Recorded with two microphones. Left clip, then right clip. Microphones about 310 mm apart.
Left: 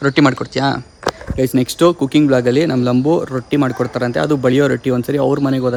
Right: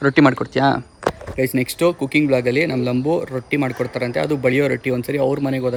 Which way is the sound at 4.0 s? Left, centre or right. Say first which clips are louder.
Left 4 dB; centre.